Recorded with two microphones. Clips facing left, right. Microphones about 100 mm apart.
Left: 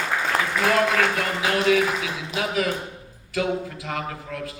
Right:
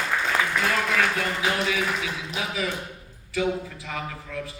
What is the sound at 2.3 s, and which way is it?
A man's voice, 60° left (ahead or behind).